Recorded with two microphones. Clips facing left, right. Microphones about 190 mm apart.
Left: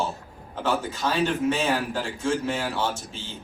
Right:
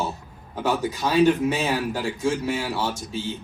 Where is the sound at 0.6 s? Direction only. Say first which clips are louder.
Right 2 dB; 15° right (ahead or behind).